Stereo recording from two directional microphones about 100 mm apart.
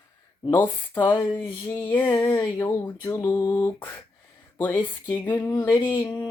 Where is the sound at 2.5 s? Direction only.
30° left (ahead or behind).